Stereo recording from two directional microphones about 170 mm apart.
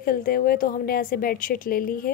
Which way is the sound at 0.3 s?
60° left (ahead or behind).